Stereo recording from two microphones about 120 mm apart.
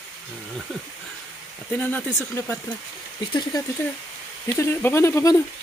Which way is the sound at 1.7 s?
15° left (ahead or behind).